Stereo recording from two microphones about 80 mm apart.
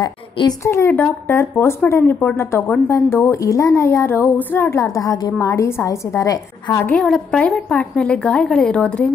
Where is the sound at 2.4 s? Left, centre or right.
Left.